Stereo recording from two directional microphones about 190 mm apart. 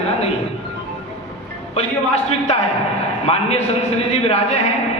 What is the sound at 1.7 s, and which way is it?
A man's voice, 35° left (ahead or behind).